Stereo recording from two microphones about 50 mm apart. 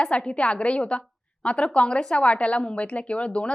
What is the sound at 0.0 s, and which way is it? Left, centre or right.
A woman's voice, left.